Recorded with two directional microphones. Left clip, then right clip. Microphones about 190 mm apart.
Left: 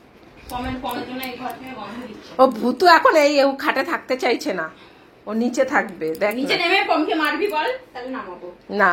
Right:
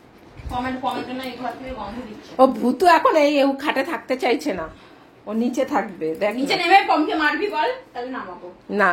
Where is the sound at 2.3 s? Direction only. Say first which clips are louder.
Even; 15° right (ahead or behind).